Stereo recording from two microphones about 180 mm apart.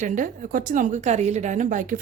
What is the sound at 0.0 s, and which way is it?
A woman's voice, 45° right (ahead or behind).